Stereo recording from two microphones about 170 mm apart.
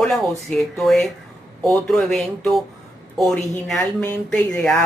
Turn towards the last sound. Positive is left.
turn(degrees=5)  # may be behind; listen again after turning